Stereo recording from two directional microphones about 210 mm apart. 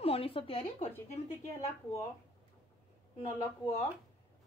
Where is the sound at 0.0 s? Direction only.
25° left (ahead or behind).